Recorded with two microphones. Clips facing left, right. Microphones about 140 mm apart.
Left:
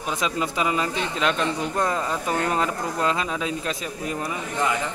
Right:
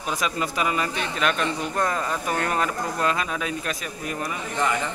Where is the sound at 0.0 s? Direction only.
20° left (ahead or behind).